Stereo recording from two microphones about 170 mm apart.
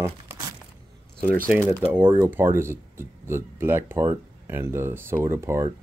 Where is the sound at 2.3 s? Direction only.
15° right (ahead or behind).